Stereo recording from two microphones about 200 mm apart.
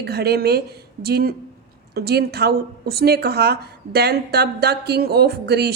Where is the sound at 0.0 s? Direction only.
55° right (ahead or behind).